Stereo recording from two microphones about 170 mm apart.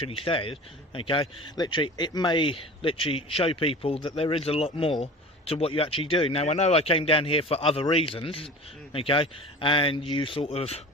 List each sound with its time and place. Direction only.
0.0 s speech: 35° left (ahead or behind)